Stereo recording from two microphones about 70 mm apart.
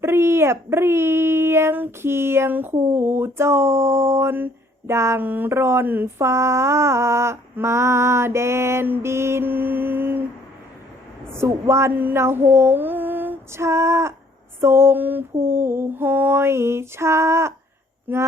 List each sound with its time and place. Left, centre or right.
0.0 s female singing: right
5.2 s speech: right
6.1 s female singing: right
11.3 s female singing: right
11.9 s mantra: right
13.5 s female singing: right
18.1 s speech: right